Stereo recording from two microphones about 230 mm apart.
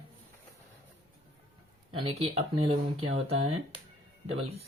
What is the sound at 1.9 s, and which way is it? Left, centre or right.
Speech, right.